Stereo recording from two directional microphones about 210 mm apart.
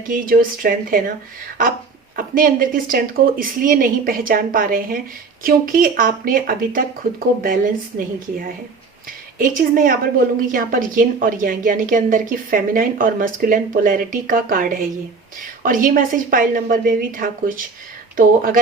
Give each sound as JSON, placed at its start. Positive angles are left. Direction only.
{"t": 0.1, "sound": "speech", "side_deg": -40}
{"t": 2.1, "sound": "a woman's voice", "side_deg": -40}